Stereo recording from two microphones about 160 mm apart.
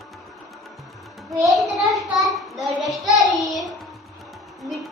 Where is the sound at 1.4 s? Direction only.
Centre (ahead or behind).